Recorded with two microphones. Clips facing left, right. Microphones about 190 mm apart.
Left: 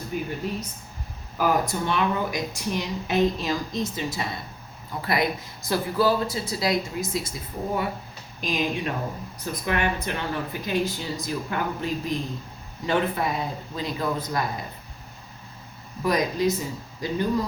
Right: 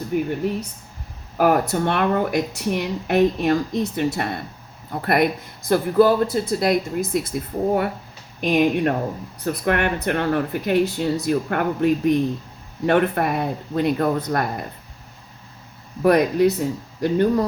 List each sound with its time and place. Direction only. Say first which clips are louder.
0.1 s speech: right 8 dB; 60° right (ahead or behind)
1.4 s speech: right 6 dB; 60° right (ahead or behind)
16.0 s speech: right 7 dB; 60° right (ahead or behind)